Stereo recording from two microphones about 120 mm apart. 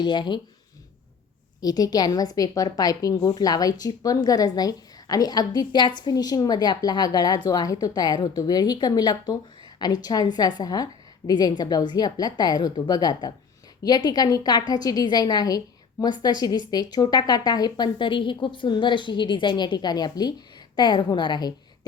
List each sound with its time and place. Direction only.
0.0 s a woman's voice: 40° left (ahead or behind)
1.6 s a woman's voice: 35° left (ahead or behind)